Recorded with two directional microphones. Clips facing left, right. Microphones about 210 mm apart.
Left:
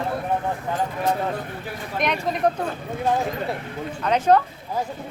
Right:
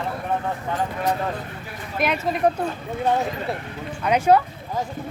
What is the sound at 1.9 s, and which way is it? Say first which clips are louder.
Speech: right 1 dB; 5° right (ahead or behind).